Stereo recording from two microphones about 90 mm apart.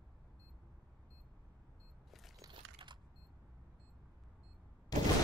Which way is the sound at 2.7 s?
60° right (ahead or behind).